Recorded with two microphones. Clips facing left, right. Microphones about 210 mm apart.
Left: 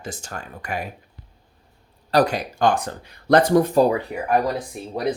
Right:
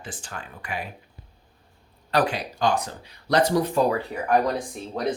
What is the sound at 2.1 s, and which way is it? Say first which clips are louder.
Speech: left 4 dB; 40° left (ahead or behind).